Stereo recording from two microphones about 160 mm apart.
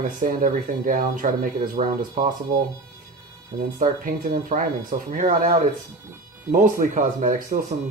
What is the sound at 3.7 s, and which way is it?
Speech, 60° right (ahead or behind).